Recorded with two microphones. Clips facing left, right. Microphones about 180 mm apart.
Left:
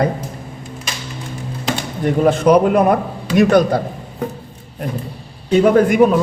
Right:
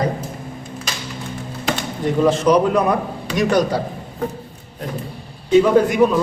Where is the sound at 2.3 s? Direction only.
55° left (ahead or behind).